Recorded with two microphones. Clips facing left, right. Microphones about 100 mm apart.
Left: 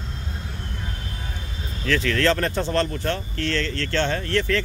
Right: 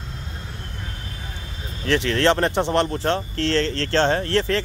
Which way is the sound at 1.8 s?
25° right (ahead or behind).